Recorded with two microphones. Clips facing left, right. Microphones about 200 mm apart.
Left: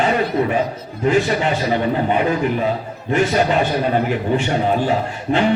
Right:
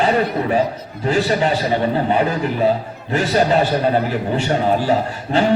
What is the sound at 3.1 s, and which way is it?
Speech, 35° right (ahead or behind).